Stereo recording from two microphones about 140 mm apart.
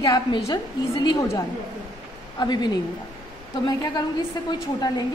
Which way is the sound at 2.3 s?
30° left (ahead or behind).